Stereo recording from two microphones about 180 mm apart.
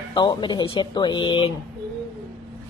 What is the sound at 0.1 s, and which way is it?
Speech, 25° left (ahead or behind).